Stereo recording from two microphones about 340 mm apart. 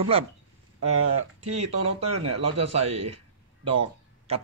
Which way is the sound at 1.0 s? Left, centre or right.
Right.